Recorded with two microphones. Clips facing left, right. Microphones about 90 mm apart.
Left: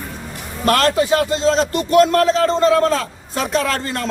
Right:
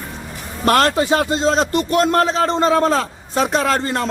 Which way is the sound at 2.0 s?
25° right (ahead or behind).